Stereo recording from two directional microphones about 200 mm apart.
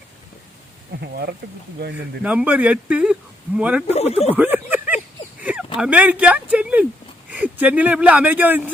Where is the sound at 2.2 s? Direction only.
5° right (ahead or behind).